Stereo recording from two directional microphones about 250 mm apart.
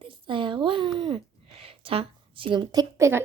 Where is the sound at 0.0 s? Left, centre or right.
Centre.